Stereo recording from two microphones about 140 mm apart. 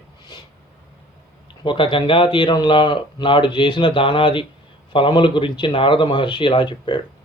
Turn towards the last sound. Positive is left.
turn(degrees=35)  # may be behind; listen again after turning